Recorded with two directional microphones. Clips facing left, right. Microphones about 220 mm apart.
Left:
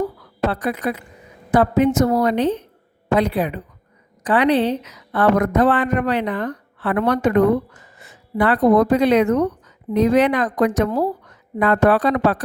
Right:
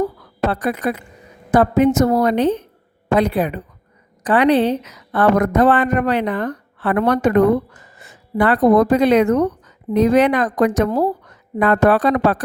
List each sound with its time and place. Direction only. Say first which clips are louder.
0.5 s speech: right 2 dB; 50° right (ahead or behind)